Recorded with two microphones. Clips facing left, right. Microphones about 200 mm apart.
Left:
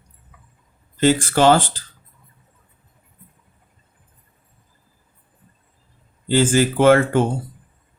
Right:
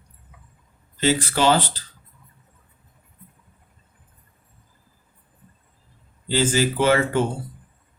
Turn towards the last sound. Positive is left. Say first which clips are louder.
# left 5 dB
turn(degrees=50)  # may be behind; listen again after turning